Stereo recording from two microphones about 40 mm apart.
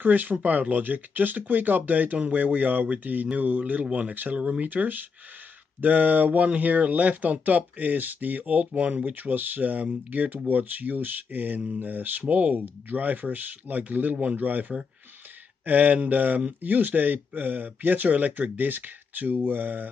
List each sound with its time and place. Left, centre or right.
0.0 s speech: right
3.8 s speech: right
4.1 s speech: right